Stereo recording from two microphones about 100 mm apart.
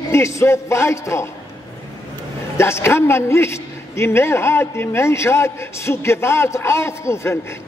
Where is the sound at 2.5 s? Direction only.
25° left (ahead or behind).